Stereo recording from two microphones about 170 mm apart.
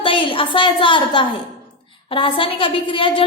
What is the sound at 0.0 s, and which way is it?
A woman's voice, 30° left (ahead or behind).